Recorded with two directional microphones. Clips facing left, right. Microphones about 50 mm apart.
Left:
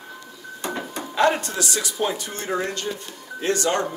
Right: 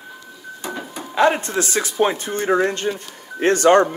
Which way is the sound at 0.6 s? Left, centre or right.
Centre.